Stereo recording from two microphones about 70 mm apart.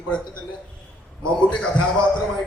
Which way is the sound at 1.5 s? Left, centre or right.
Centre.